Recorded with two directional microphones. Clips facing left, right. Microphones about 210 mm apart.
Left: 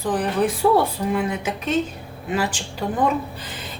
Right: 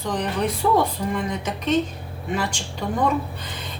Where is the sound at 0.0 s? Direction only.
5° left (ahead or behind).